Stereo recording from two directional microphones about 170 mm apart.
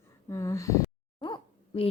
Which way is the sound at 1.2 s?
30° left (ahead or behind).